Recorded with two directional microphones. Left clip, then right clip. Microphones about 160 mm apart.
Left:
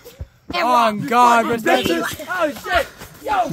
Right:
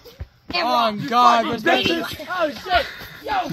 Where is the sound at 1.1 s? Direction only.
35° left (ahead or behind).